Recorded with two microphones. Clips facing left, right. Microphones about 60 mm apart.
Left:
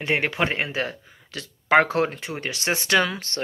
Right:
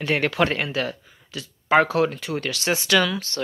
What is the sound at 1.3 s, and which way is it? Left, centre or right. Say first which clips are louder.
Speech: even; left.